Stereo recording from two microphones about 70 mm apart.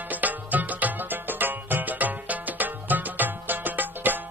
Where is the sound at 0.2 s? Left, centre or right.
Right.